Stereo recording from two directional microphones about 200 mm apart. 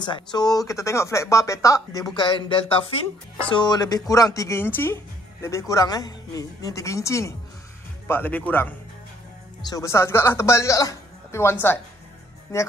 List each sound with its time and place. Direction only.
0.0 s speech: 20° left (ahead or behind)